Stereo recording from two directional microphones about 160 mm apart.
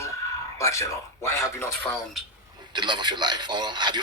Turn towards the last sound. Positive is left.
turn(degrees=-25)  # may be behind; listen again after turning